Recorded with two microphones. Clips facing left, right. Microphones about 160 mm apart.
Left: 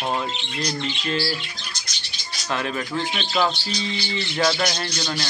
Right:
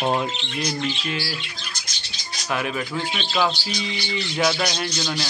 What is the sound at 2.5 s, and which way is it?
Speech, 5° right (ahead or behind).